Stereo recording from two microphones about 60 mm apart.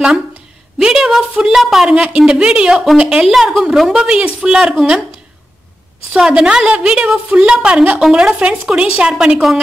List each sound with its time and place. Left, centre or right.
0.7 s a sound: centre
1.3 s a woman's voice: centre
6.1 s a woman's voice: centre